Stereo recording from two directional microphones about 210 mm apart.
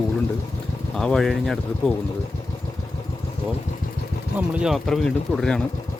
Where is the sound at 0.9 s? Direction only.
Centre (ahead or behind).